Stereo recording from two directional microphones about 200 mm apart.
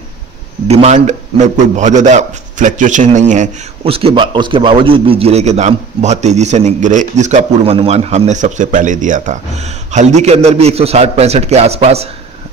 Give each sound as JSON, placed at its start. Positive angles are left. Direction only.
{"t": 0.7, "sound": "a man's voice", "side_deg": -30}